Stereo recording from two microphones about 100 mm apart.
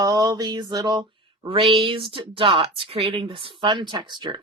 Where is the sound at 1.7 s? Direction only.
60° right (ahead or behind).